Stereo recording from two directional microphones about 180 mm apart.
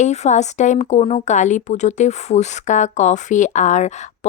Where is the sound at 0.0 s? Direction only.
40° left (ahead or behind).